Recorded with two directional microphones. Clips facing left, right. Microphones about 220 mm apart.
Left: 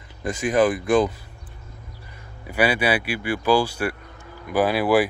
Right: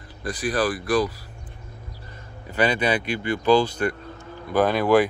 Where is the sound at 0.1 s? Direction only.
20° left (ahead or behind).